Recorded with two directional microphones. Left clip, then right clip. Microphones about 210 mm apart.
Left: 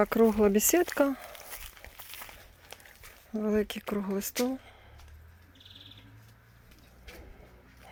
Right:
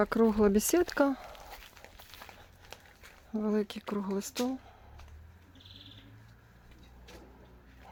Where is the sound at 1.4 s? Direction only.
50° left (ahead or behind).